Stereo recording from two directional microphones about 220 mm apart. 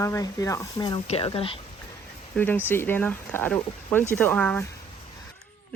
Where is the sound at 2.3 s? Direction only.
10° left (ahead or behind).